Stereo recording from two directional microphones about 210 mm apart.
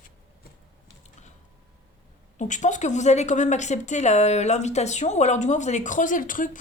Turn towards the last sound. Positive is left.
turn(degrees=40)  # may be behind; listen again after turning